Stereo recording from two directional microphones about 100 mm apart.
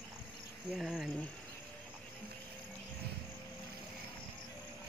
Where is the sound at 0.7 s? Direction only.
Centre (ahead or behind).